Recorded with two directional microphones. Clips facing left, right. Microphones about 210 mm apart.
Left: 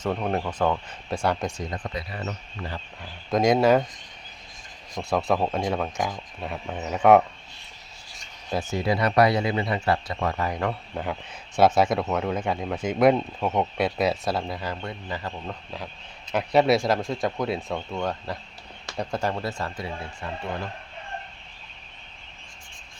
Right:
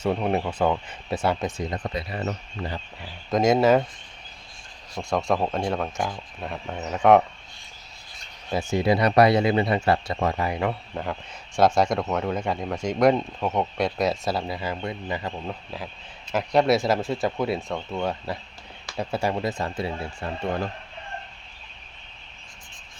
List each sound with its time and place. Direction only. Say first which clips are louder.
0.0 s speech: right 2 dB; 10° right (ahead or behind)
1.7 s speech: right 3 dB; 25° right (ahead or behind)
3.0 s speech: even; centre (ahead or behind)
5.0 s speech: even; 5° left (ahead or behind)
8.7 s speech: right 3 dB; 20° right (ahead or behind)
10.3 s speech: right 1 dB; 10° right (ahead or behind)
16.3 s speech: even; centre (ahead or behind); by 19.9 s 20° right (ahead or behind)